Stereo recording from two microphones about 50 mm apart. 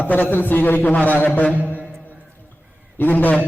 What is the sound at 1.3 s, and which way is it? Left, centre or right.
Mantra, left.